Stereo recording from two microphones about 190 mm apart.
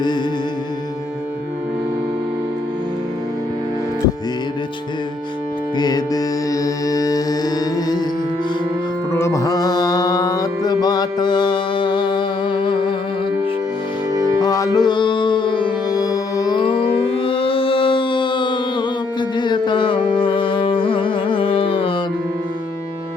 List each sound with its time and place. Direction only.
5.7 s music: 20° left (ahead or behind)
9.1 s music: 15° left (ahead or behind)
14.3 s music: 20° left (ahead or behind)